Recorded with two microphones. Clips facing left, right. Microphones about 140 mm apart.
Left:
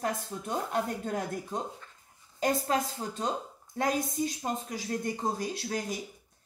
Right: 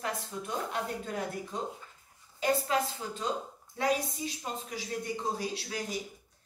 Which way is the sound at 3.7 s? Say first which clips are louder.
Left 1 dB; 45° left (ahead or behind).